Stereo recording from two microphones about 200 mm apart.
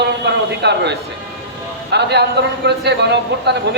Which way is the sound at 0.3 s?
60° right (ahead or behind).